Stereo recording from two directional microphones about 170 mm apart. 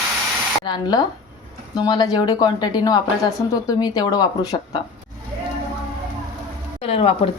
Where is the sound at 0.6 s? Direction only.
25° left (ahead or behind).